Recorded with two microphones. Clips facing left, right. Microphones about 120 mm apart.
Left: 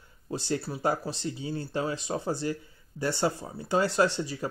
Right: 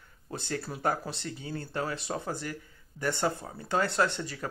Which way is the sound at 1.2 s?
20° left (ahead or behind).